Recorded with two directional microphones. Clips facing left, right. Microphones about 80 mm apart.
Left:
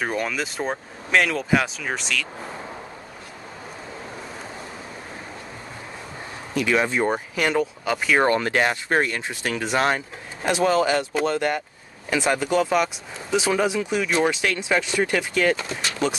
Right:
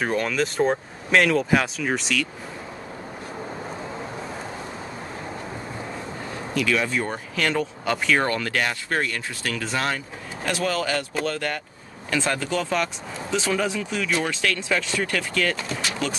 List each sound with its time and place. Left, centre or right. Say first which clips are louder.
0.0 s speech: right 2 dB; centre
6.5 s speech: left 2 dB; left
8.3 s speech: left 4 dB; left